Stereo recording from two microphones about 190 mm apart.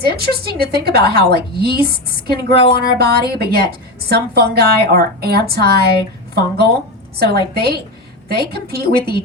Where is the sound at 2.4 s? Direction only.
25° left (ahead or behind).